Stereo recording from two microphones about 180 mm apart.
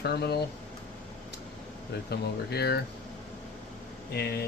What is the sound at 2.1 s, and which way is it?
Speech, 65° left (ahead or behind).